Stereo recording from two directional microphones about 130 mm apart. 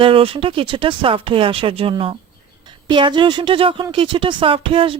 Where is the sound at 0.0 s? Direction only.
45° right (ahead or behind).